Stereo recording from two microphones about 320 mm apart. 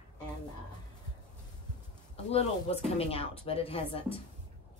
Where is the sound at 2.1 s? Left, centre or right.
Centre.